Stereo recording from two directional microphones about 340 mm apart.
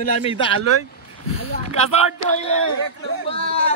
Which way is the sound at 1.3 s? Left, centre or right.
Centre.